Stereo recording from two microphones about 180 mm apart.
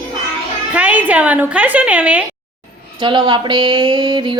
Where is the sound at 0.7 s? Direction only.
10° right (ahead or behind).